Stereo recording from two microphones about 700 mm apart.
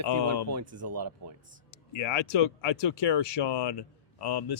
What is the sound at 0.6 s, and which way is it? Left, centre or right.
Speech, centre.